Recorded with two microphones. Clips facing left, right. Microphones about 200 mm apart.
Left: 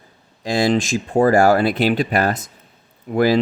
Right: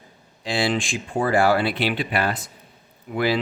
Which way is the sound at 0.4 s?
40° left (ahead or behind).